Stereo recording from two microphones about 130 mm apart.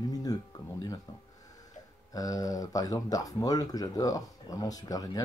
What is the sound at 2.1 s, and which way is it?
Speech, 25° left (ahead or behind).